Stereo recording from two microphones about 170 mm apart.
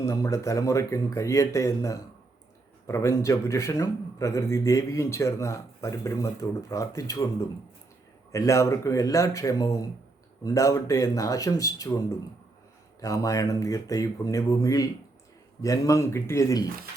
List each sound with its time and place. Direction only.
0.0 s a man's voice: 20° left (ahead or behind)
8.3 s a man's voice: 15° left (ahead or behind)